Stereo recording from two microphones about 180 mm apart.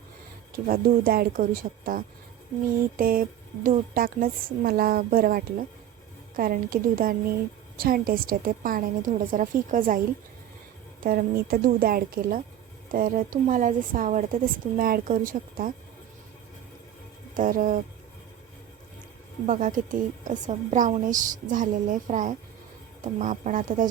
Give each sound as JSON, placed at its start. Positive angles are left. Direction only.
{"t": 0.5, "sound": "a woman's voice", "side_deg": -55}
{"t": 11.0, "sound": "a woman's voice", "side_deg": -55}
{"t": 17.3, "sound": "a woman's voice", "side_deg": -50}
{"t": 19.5, "sound": "a woman's voice", "side_deg": -45}